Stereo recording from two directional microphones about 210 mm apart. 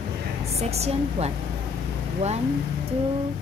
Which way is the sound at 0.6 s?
30° right (ahead or behind).